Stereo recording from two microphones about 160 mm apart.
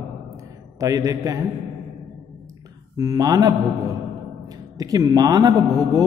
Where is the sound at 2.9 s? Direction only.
25° right (ahead or behind).